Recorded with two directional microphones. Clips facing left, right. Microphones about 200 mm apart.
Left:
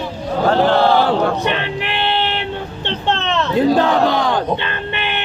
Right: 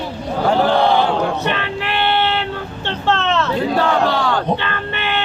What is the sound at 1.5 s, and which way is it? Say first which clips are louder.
Music: left 1 dB; 20° left (ahead or behind).